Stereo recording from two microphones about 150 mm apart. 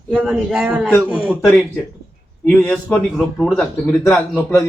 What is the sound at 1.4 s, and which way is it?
Speech, 10° left (ahead or behind).